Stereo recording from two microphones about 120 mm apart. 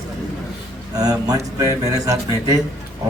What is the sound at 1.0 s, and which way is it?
A man's voice, 30° right (ahead or behind).